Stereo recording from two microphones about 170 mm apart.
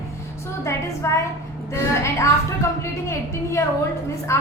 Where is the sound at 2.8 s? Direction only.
15° left (ahead or behind).